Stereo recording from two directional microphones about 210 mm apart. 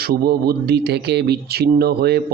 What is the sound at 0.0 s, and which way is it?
Speech, 45° right (ahead or behind).